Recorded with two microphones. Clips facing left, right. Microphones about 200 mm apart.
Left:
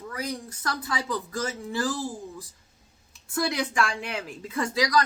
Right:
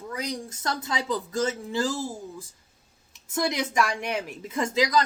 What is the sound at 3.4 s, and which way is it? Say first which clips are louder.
A woman's voice: right 1 dB; 20° right (ahead or behind).